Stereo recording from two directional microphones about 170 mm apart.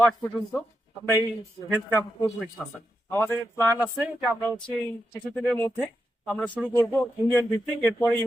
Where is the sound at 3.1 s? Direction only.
15° left (ahead or behind).